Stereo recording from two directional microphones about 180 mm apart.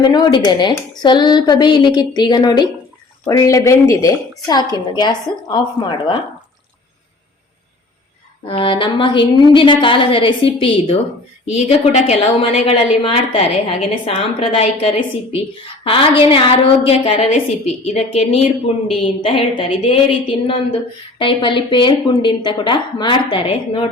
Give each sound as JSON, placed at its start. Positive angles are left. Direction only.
{"t": 0.0, "sound": "speech", "side_deg": 25}
{"t": 8.4, "sound": "a woman's voice", "side_deg": 30}